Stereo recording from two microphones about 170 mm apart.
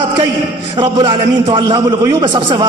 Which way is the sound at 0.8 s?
20° right (ahead or behind).